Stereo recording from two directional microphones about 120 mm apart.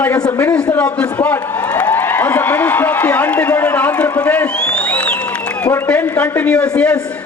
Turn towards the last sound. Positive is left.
turn(degrees=10)  # may be behind; listen again after turning